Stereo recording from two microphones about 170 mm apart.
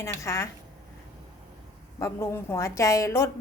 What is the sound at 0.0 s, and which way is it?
Speech, 15° left (ahead or behind).